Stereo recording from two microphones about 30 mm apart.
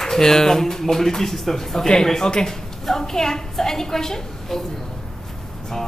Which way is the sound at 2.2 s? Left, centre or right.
Left.